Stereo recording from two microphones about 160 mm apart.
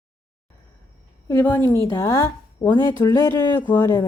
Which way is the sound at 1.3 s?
15° left (ahead or behind).